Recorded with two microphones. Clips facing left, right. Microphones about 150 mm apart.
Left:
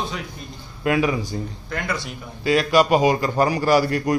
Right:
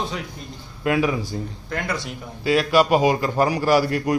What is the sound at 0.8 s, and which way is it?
Speech, centre (ahead or behind).